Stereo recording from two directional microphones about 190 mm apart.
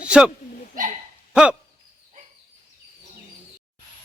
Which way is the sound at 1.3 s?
5° right (ahead or behind).